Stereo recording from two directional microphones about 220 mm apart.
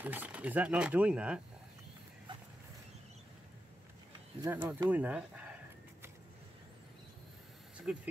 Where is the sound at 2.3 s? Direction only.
20° right (ahead or behind).